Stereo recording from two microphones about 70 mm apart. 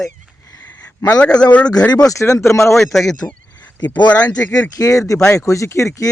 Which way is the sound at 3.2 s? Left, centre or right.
Left.